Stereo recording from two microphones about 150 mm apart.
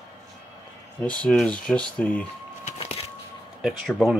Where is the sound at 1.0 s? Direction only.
5° left (ahead or behind).